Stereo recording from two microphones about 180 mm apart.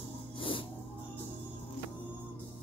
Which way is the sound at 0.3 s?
30° left (ahead or behind).